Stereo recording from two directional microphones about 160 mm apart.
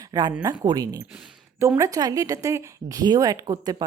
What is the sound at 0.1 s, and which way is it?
A woman's voice, 25° right (ahead or behind).